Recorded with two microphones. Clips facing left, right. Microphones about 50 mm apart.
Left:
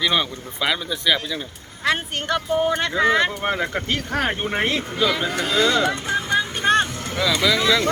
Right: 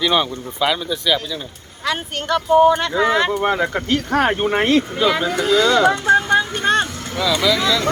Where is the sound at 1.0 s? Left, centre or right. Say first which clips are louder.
Even; centre.